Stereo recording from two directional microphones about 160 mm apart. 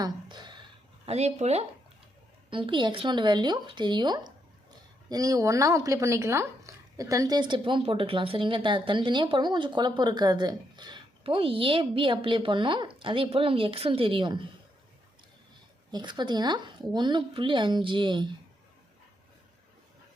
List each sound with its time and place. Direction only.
0.0 s a sound: 25° right (ahead or behind)
1.0 s speech: 45° right (ahead or behind)
2.5 s speech: 30° right (ahead or behind)
15.9 s speech: 25° right (ahead or behind)